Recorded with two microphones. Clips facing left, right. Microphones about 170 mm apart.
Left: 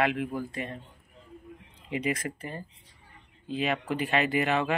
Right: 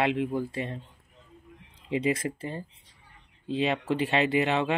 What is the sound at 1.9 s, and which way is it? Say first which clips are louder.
Speech: right 3 dB; 25° right (ahead or behind).